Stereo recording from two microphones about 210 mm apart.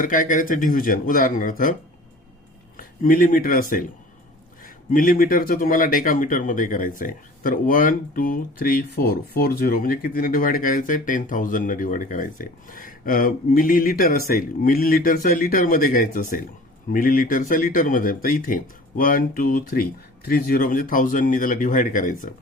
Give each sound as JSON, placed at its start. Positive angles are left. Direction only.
{"t": 0.0, "sound": "speech", "side_deg": 40}
{"t": 2.7, "sound": "speech", "side_deg": 40}